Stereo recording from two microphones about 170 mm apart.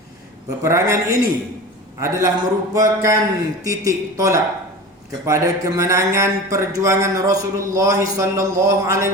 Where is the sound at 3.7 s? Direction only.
20° right (ahead or behind).